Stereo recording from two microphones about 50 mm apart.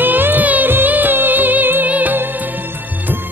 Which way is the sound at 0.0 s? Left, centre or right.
Right.